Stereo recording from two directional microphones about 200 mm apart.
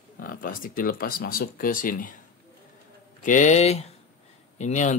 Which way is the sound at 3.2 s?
40° left (ahead or behind).